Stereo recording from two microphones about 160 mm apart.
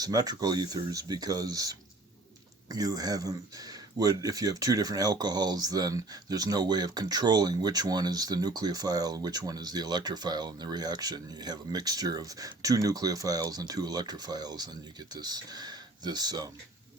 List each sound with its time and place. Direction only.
0.0 s speech: 25° right (ahead or behind)